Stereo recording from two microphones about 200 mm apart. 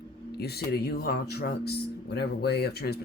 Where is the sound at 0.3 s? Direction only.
55° left (ahead or behind).